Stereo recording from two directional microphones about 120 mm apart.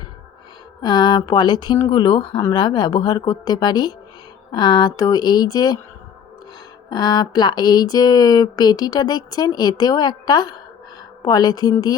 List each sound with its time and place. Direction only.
0.8 s speech: 40° left (ahead or behind)
6.9 s speech: 35° left (ahead or behind)